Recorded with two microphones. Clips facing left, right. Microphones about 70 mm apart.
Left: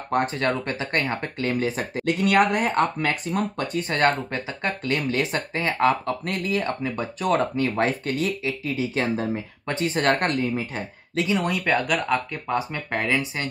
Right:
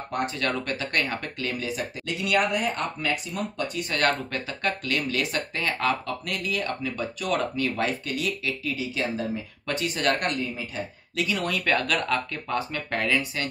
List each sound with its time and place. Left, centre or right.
0.4 s speech: left
3.9 s speech: left
11.1 s speech: left